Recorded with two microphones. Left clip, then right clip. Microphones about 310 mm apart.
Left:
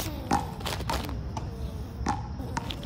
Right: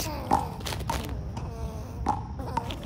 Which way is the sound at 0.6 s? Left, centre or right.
Centre.